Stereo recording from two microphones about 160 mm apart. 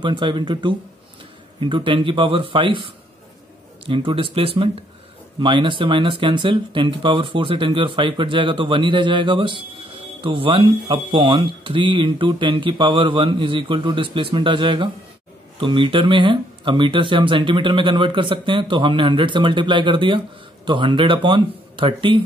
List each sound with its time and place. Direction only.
0.0 s speech: 30° right (ahead or behind)